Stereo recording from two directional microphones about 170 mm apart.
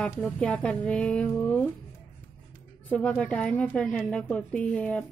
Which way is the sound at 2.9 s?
5° left (ahead or behind).